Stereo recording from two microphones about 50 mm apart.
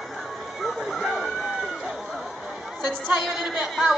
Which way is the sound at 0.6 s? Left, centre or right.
Centre.